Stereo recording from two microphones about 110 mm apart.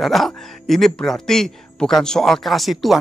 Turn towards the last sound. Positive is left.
turn(degrees=0)  # may be behind; listen again after turning